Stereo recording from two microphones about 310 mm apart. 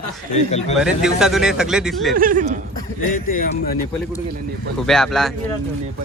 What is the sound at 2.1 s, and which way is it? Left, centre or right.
Speech, right.